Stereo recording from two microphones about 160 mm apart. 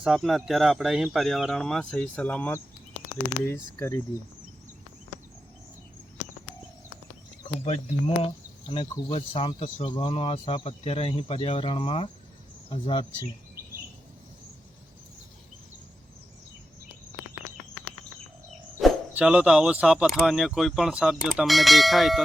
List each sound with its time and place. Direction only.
0.0 s speech: centre (ahead or behind)
3.8 s speech: 15° left (ahead or behind)
7.6 s speech: 40° left (ahead or behind)
18.8 s speech: centre (ahead or behind)